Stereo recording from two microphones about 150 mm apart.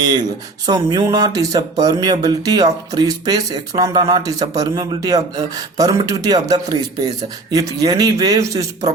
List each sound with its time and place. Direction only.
0.1 s speech: 25° right (ahead or behind)